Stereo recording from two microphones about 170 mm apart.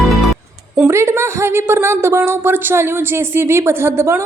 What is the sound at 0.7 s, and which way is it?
A woman's voice, 15° right (ahead or behind).